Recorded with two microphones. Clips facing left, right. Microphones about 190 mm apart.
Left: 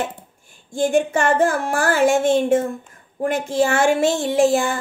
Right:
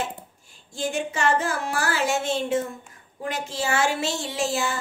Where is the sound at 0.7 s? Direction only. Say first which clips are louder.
Left 9 dB; 50° left (ahead or behind).